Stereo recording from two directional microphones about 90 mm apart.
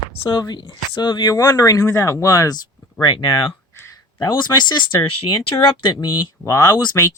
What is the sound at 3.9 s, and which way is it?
Speech, 45° left (ahead or behind).